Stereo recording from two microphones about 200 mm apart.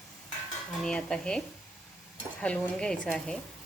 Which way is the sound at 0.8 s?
5° left (ahead or behind).